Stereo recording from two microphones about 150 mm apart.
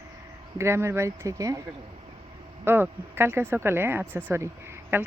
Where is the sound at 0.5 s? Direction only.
15° right (ahead or behind).